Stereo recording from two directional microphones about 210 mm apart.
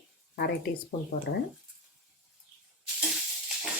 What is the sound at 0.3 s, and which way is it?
Speech, 50° left (ahead or behind).